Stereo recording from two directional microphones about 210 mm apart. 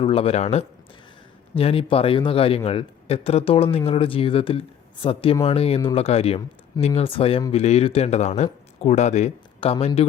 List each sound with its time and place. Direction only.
0.0 s speech: 25° left (ahead or behind)